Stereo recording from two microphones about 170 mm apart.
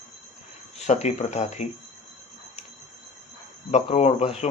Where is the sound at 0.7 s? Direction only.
40° left (ahead or behind).